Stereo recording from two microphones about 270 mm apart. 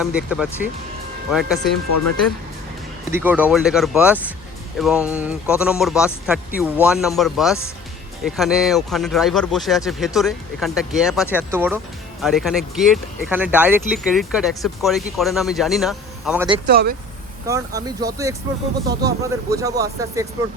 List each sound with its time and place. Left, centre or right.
0.0 s speech: centre
3.1 s speech: centre
16.6 s speech: right
17.4 s speech: centre